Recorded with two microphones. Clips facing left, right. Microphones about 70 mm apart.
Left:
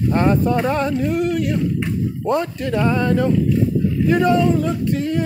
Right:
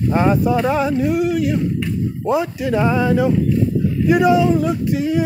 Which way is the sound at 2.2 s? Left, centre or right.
Centre.